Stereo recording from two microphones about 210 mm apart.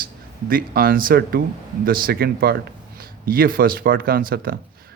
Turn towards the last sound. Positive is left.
turn(degrees=-45)  # may be behind; listen again after turning